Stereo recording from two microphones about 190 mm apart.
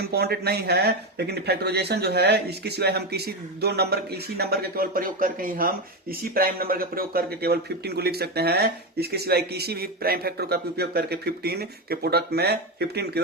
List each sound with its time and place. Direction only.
0.1 s speech: 60° right (ahead or behind)